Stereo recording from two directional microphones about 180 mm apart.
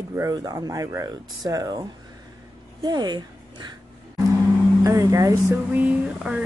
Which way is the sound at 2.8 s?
25° right (ahead or behind).